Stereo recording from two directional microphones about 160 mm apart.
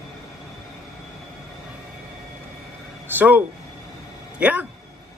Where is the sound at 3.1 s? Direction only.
10° right (ahead or behind).